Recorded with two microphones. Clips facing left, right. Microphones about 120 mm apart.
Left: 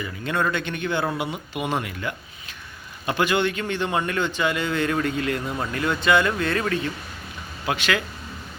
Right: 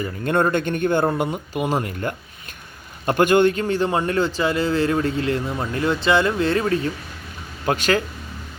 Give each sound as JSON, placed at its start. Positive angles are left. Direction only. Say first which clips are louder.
{"t": 0.0, "sound": "a man's voice", "louder": "right 5 dB", "side_deg": -45}
{"t": 7.6, "sound": "a man's voice", "louder": "right 5 dB", "side_deg": -40}